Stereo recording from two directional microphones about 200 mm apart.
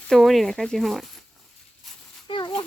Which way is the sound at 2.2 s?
25° left (ahead or behind).